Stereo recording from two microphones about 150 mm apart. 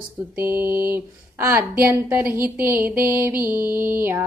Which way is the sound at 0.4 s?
15° right (ahead or behind).